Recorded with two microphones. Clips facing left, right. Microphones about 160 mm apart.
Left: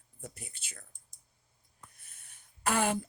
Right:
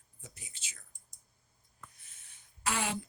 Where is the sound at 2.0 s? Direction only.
55° left (ahead or behind).